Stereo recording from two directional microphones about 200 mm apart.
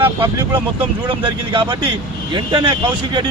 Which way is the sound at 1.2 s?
25° right (ahead or behind).